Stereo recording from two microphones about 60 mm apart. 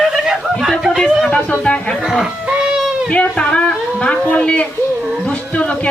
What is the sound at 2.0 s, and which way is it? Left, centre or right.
Cat, centre.